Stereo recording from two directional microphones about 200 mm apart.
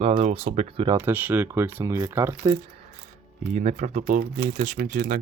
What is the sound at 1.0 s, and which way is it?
Speech, 10° right (ahead or behind).